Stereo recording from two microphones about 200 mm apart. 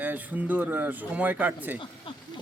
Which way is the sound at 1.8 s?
25° left (ahead or behind).